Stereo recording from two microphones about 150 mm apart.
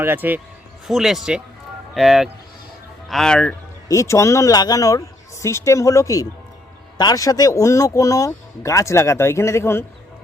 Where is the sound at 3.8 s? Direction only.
20° left (ahead or behind).